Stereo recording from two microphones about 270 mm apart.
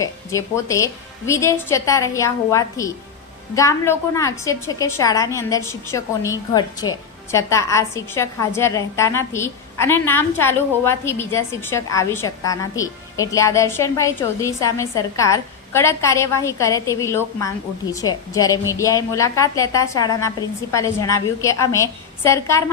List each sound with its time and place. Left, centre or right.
0.0 s a woman's voice: centre